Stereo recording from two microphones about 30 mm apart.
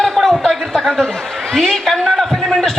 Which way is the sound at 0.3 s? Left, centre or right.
Centre.